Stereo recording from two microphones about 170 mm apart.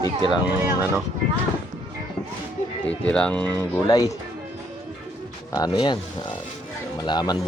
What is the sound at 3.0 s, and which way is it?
Speech, 5° left (ahead or behind).